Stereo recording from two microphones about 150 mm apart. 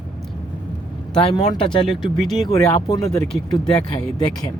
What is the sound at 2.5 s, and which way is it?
Speech, 25° left (ahead or behind).